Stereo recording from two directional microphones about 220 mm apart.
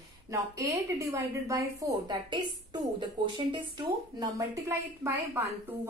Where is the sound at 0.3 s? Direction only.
15° right (ahead or behind).